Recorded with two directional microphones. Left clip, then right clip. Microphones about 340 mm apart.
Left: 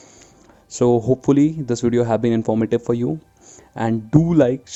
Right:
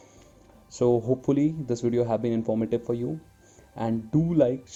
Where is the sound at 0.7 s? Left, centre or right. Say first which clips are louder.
Left 6 dB; left.